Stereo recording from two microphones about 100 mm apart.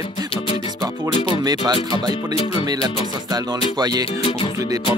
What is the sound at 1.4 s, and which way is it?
Speech, 40° right (ahead or behind).